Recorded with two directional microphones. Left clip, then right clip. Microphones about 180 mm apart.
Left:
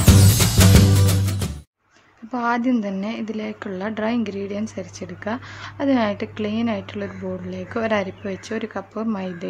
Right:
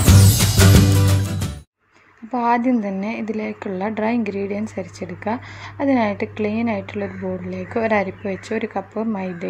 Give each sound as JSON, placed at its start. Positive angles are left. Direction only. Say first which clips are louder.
{"t": 0.0, "sound": "music", "louder": "even", "side_deg": 0}
{"t": 2.3, "sound": "a woman's voice", "louder": "right 3 dB", "side_deg": -5}